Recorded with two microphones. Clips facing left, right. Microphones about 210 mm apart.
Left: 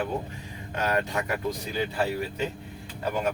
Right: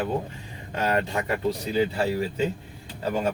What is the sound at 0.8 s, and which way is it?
Speech, 25° right (ahead or behind).